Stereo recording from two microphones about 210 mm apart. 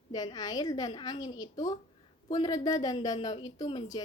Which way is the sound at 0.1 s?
20° left (ahead or behind).